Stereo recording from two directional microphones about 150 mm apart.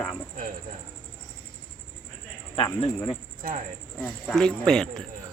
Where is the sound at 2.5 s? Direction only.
40° left (ahead or behind).